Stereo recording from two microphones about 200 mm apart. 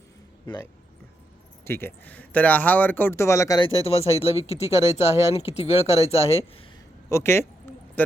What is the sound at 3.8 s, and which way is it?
Speech, 30° left (ahead or behind).